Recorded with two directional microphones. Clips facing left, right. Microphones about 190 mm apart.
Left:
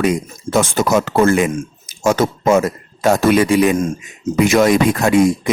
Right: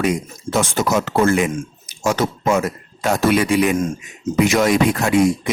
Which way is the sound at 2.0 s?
45° left (ahead or behind).